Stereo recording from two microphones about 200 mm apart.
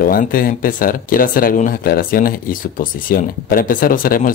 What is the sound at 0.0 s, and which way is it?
Speech, 45° left (ahead or behind).